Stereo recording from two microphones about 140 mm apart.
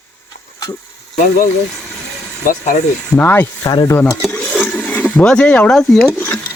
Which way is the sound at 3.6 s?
30° left (ahead or behind).